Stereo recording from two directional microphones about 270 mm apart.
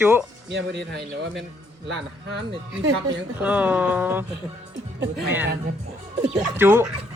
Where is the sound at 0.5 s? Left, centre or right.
Right.